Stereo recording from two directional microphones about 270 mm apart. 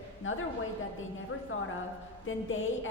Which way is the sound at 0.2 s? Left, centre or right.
Left.